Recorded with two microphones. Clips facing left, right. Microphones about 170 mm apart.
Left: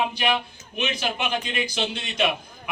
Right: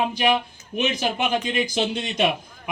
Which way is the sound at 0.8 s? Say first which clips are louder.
Right 4 dB; 45° right (ahead or behind).